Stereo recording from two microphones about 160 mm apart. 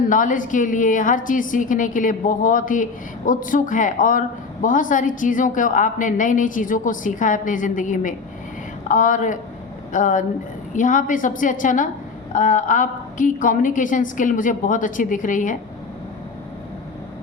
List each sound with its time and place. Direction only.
0.1 s a woman's voice: 55° left (ahead or behind)